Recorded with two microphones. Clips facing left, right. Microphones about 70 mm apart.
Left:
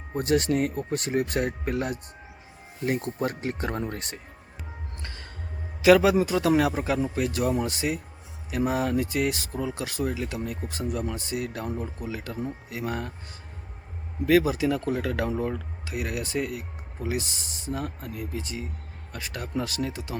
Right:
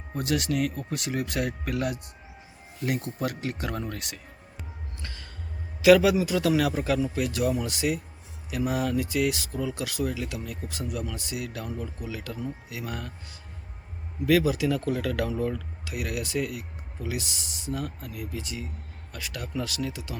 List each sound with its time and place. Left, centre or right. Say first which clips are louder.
0.1 s speech: left 4 dB; left
5.0 s music: even; left
5.8 s speech: even; left
14.3 s speech: left 1 dB; left